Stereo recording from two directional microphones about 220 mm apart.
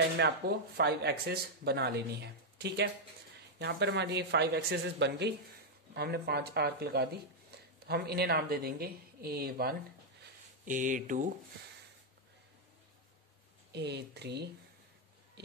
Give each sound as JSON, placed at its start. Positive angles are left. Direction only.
{"t": 0.2, "sound": "speech", "side_deg": -50}
{"t": 13.7, "sound": "speech", "side_deg": -50}